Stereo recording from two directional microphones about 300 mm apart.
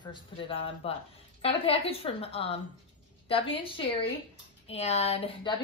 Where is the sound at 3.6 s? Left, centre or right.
Centre.